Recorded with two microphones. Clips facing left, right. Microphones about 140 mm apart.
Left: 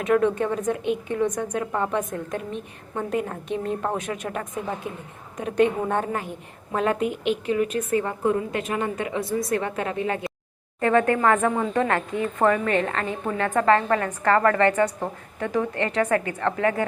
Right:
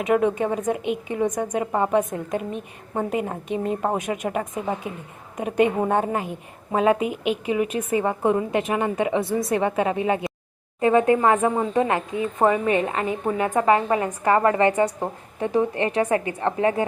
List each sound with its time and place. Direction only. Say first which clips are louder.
0.0 s speech: even; 10° right (ahead or behind)